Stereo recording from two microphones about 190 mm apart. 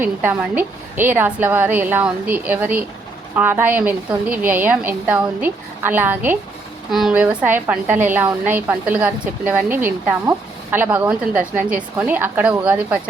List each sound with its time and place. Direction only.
0.0 s a woman's voice: 10° right (ahead or behind)